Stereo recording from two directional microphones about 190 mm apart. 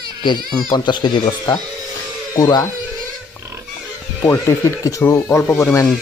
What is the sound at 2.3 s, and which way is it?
Speech, 20° left (ahead or behind).